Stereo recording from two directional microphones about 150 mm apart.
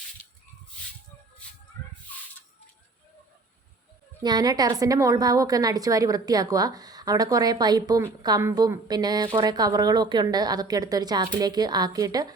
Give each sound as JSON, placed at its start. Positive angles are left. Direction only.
{"t": 1.4, "sound": "a sound", "side_deg": 10}
{"t": 2.1, "sound": "rodents", "side_deg": 10}
{"t": 4.2, "sound": "a woman's voice", "side_deg": -30}